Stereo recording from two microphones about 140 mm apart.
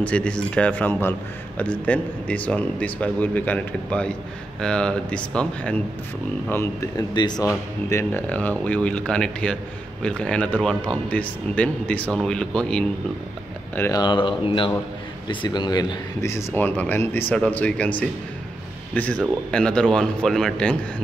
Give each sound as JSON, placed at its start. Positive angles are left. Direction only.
{"t": 0.0, "sound": "speech", "side_deg": 10}
{"t": 7.0, "sound": "speech", "side_deg": 30}
{"t": 7.9, "sound": "speech", "side_deg": 15}
{"t": 13.9, "sound": "a man's voice", "side_deg": 35}